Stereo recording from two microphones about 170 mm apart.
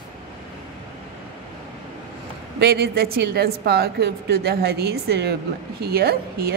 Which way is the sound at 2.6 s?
65° right (ahead or behind).